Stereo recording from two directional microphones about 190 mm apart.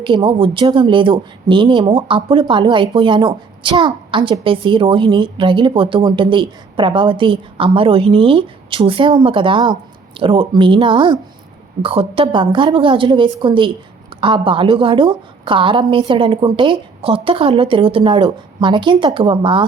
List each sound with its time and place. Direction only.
0.0 s speech: 25° right (ahead or behind)